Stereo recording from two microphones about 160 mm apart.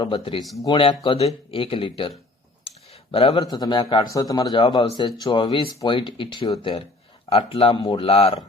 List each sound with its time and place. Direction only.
0.0 s speech: 30° left (ahead or behind)
2.6 s a sound: 35° left (ahead or behind)
3.4 s speech: 25° left (ahead or behind)